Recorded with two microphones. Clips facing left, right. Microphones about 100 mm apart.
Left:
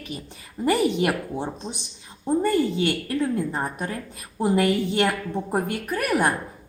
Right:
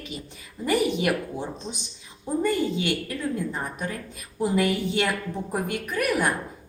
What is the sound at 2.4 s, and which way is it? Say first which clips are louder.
A woman's voice: left 1 dB; 50° left (ahead or behind).